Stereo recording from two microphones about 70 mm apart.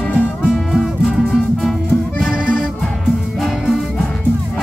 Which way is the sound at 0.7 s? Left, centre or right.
Centre.